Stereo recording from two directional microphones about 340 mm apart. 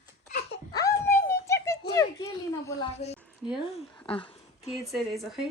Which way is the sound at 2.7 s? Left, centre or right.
Centre.